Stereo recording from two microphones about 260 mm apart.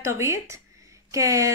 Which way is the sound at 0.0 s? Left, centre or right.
Centre.